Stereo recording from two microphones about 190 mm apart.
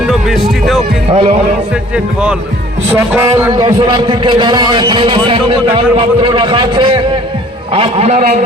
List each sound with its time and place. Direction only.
0.1 s music: centre (ahead or behind)
1.1 s a man's voice: 35° right (ahead or behind)
3.5 s a man's voice: 20° right (ahead or behind); by 8.4 s 40° right (ahead or behind)